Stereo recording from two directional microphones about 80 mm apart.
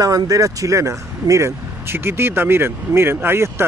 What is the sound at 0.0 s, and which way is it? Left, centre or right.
Speech, right.